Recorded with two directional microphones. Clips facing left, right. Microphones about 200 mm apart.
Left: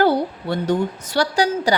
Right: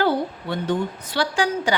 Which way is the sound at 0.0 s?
40° left (ahead or behind).